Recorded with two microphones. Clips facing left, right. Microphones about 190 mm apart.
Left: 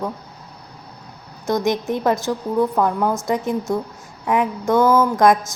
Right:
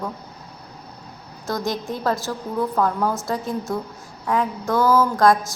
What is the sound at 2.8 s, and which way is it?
Speech, 15° left (ahead or behind).